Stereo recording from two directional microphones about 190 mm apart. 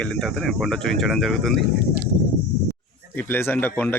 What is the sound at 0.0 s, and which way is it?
Speech, centre (ahead or behind).